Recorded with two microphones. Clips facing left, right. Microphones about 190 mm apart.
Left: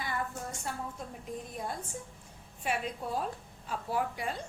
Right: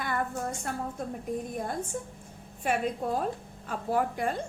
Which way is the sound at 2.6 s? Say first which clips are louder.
Right 6 dB; 50° right (ahead or behind).